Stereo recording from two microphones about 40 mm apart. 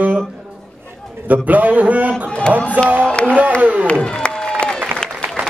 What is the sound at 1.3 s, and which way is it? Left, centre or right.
A man's voice, right.